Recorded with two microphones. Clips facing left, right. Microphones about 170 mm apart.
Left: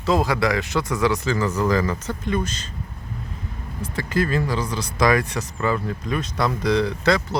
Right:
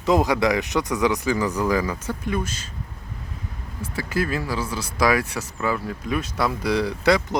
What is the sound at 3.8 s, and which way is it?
Speech, 10° right (ahead or behind).